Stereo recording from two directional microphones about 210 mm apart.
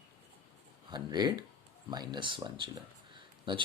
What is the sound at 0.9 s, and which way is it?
Speech, 20° right (ahead or behind).